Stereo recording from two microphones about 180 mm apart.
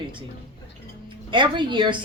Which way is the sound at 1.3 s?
25° right (ahead or behind).